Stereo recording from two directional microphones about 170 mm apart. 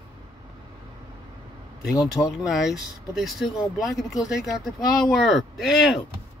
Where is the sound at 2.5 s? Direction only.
Centre (ahead or behind).